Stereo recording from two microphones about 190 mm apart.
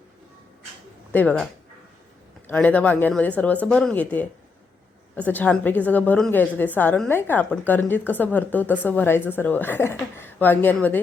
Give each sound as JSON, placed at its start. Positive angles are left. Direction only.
{"t": 1.1, "sound": "a woman's voice", "side_deg": 10}
{"t": 2.5, "sound": "a woman's voice", "side_deg": 10}